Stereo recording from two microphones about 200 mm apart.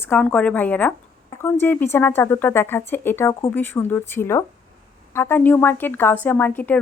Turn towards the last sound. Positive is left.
turn(degrees=10)  # may be behind; listen again after turning